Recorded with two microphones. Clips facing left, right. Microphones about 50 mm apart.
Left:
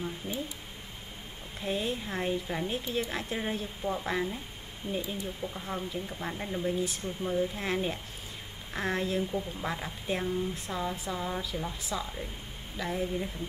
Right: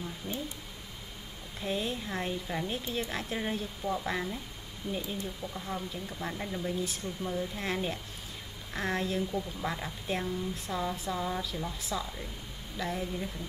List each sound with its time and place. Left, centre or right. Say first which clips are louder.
0.2 s a sound: right 1 dB; left
1.6 s speech: left 1 dB; centre
4.8 s speech: left 1 dB; left
5.4 s speech: left 1 dB; centre